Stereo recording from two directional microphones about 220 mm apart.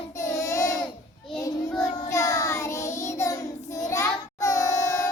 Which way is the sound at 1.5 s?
Centre (ahead or behind).